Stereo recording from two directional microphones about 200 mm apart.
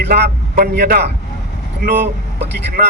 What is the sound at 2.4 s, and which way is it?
Speech, 60° right (ahead or behind).